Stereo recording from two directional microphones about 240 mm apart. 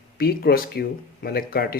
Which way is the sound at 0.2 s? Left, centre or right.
Left.